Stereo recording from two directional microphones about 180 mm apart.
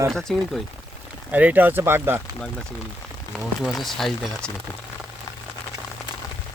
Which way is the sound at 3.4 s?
Centre (ahead or behind).